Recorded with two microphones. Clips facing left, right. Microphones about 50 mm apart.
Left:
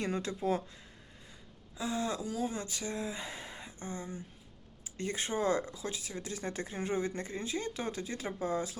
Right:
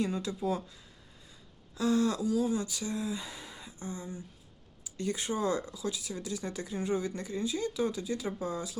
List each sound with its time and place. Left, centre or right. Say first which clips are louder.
0.0 s speech: right 2 dB; left
1.7 s speech: right 6 dB; centre; by 8.7 s left